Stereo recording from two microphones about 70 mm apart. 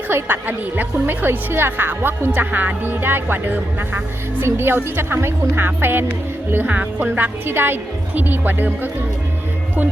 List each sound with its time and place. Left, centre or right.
0.1 s a woman's voice: right